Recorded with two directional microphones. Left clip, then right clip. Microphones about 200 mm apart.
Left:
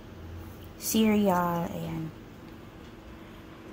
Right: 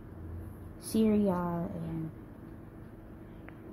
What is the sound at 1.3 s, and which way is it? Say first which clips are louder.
Speech: left 8 dB; 20° left (ahead or behind).